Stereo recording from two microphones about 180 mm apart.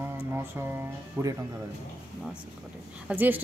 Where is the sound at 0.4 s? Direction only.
10° right (ahead or behind).